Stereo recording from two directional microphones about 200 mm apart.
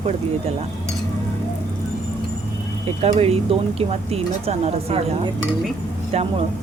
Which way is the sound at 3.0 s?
30° right (ahead or behind).